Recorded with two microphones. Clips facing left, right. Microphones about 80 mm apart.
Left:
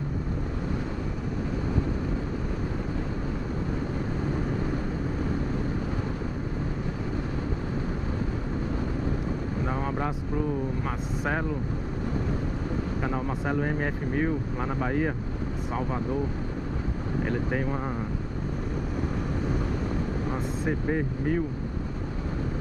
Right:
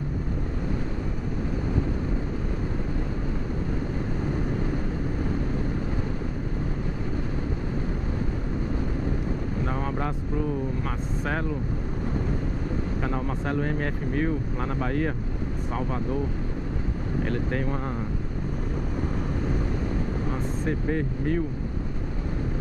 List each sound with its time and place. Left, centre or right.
9.7 s vehicle: centre
13.0 s speech: centre
17.2 s speech: centre
20.6 s speech: centre